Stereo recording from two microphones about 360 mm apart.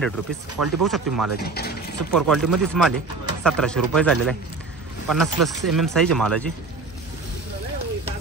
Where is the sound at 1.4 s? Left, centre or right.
Left.